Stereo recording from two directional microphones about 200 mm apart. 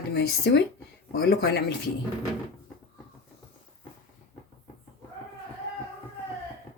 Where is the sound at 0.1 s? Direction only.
55° left (ahead or behind).